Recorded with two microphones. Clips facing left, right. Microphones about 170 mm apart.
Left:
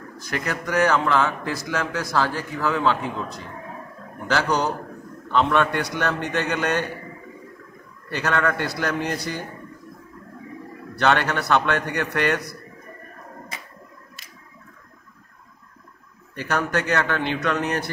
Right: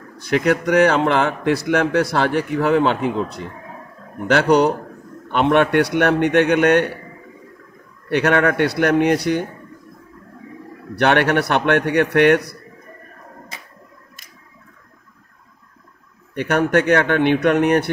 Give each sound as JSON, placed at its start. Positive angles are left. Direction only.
{"t": 0.2, "sound": "a man's voice", "side_deg": -70}
{"t": 8.1, "sound": "a man's voice", "side_deg": -65}
{"t": 11.0, "sound": "a man's voice", "side_deg": -65}
{"t": 16.3, "sound": "a man's voice", "side_deg": -60}